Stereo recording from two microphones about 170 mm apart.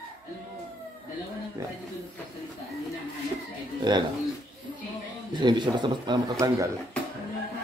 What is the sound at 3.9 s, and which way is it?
Speech, 25° right (ahead or behind).